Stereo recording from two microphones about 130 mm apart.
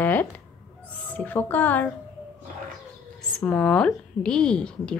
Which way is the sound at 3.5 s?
10° left (ahead or behind).